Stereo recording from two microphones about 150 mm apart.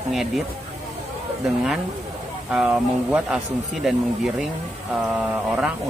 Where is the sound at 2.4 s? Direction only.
5° right (ahead or behind).